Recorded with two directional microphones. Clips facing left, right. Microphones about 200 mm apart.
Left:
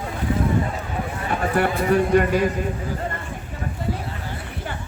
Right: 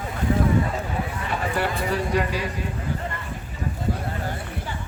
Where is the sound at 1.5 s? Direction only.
55° left (ahead or behind).